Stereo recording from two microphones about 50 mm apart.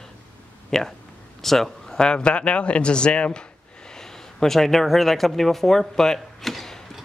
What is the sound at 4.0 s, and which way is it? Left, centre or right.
Speech, centre.